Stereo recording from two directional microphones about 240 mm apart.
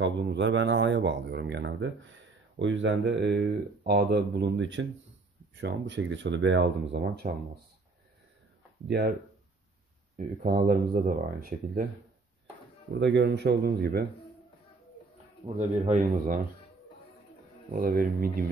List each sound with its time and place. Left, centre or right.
0.0 s speech: right
8.8 s speech: right
10.1 s speech: right
13.0 s speech: right
15.4 s speech: right
17.6 s speech: right